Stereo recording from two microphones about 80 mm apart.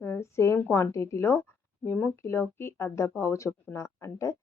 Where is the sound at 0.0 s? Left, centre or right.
Left.